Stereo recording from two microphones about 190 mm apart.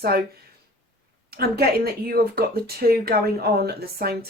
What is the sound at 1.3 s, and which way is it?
Speech, 55° right (ahead or behind).